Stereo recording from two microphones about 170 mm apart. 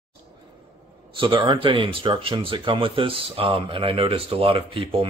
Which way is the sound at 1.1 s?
30° right (ahead or behind).